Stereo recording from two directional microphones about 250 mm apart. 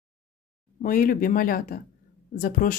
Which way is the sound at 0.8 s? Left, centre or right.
Left.